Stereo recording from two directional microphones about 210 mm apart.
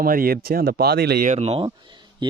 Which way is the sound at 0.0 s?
45° right (ahead or behind).